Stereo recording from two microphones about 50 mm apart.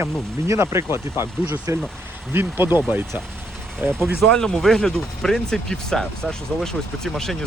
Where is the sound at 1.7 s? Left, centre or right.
Right.